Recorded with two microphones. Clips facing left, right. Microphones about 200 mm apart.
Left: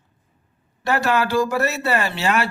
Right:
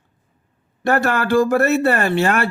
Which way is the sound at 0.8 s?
55° right (ahead or behind).